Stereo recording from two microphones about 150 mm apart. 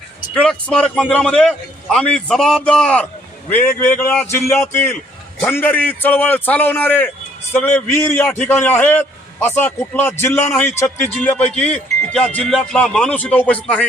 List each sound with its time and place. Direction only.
0.3 s a man's voice: 5° left (ahead or behind)